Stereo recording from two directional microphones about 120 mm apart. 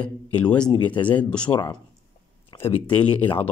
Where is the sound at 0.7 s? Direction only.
40° left (ahead or behind).